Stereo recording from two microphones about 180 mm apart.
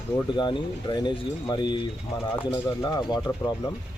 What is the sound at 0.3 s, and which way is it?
Speech, 25° left (ahead or behind).